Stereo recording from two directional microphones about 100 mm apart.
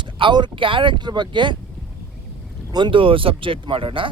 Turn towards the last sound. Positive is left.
turn(degrees=-60)  # may be behind; listen again after turning